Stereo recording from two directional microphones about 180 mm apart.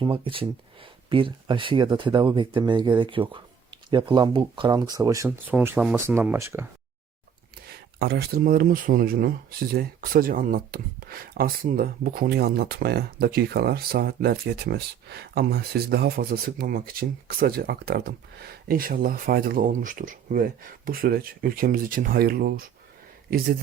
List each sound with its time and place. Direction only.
0.0 s speech: 30° right (ahead or behind); by 6.7 s 15° right (ahead or behind)
7.9 s speech: 60° right (ahead or behind)